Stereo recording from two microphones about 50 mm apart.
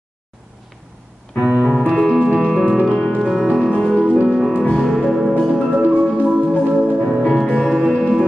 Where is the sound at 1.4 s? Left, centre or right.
Centre.